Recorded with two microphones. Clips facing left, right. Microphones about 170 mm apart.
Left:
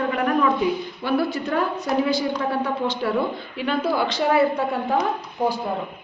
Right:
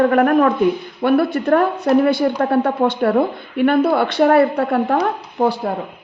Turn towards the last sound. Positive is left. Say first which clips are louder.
# right 5 dB
turn(degrees=-65)  # may be behind; listen again after turning